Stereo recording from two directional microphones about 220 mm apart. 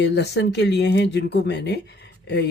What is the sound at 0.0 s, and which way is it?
Speech, 50° left (ahead or behind).